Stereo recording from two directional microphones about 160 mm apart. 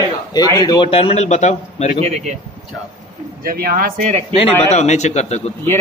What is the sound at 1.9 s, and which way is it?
Speech, 40° right (ahead or behind).